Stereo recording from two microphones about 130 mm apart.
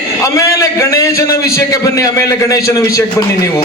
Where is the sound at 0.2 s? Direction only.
25° left (ahead or behind).